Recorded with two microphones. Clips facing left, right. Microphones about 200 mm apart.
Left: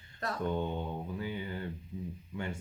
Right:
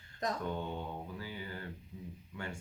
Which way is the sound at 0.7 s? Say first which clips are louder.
Left 4 dB; 20° left (ahead or behind).